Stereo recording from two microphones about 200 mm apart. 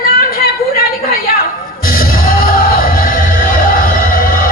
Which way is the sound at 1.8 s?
45° left (ahead or behind).